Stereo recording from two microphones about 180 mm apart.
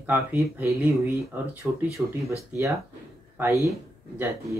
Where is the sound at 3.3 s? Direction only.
15° right (ahead or behind).